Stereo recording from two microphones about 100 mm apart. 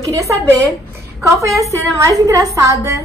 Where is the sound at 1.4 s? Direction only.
30° right (ahead or behind).